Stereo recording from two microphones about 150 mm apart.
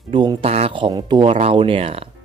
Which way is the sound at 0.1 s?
35° right (ahead or behind).